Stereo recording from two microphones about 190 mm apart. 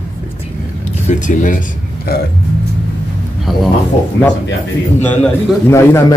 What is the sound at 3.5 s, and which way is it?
Speech, centre (ahead or behind).